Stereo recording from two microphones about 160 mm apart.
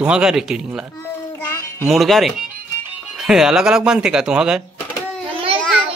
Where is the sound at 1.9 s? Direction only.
Centre (ahead or behind).